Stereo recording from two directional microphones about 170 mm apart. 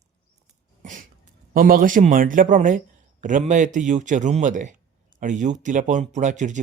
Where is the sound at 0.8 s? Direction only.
50° right (ahead or behind).